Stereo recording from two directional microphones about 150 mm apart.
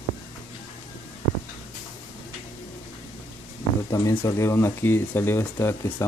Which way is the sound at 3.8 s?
20° left (ahead or behind).